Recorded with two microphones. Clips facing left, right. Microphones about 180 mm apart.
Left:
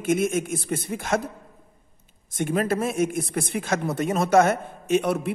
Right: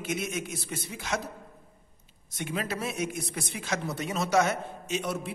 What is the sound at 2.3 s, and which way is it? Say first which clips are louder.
A man's voice: left 9 dB; 50° left (ahead or behind).